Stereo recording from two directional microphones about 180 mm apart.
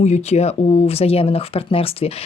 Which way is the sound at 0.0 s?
40° left (ahead or behind).